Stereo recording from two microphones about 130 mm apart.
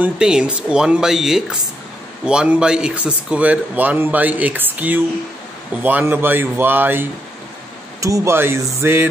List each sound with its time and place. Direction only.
0.0 s a man's voice: 5° right (ahead or behind)